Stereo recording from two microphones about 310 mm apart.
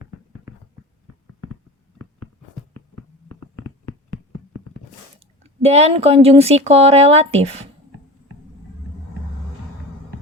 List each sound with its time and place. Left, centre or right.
5.4 s speech: centre